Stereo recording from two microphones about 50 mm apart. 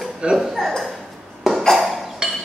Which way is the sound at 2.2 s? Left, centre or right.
Centre.